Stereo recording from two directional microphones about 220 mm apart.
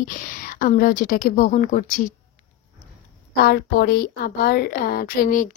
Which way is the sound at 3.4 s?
45° left (ahead or behind).